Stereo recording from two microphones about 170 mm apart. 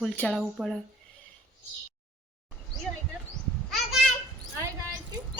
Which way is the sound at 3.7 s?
Centre (ahead or behind).